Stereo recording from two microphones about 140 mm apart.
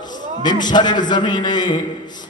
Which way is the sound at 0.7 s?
30° left (ahead or behind).